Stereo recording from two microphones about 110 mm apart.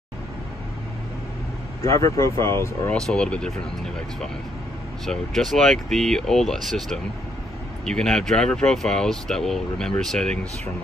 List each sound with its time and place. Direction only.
1.8 s speech: 30° left (ahead or behind)
2.9 s speech: 5° left (ahead or behind)
5.0 s speech: 5° left (ahead or behind)